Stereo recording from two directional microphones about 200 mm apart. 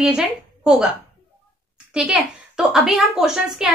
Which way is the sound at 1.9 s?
5° right (ahead or behind).